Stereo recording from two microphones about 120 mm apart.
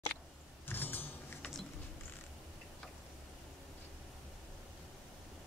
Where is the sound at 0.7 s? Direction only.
15° left (ahead or behind).